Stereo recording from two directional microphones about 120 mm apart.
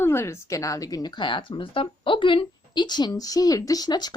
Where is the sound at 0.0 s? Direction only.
20° left (ahead or behind).